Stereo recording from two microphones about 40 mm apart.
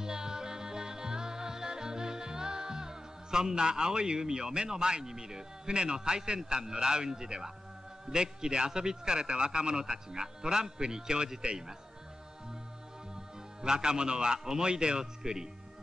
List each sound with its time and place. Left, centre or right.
0.0 s music: centre
8.1 s a man's voice: right
13.1 s a man's voice: centre